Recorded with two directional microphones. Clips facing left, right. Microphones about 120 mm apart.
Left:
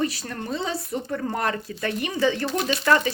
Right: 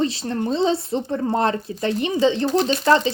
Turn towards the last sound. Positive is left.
turn(degrees=-25)  # may be behind; listen again after turning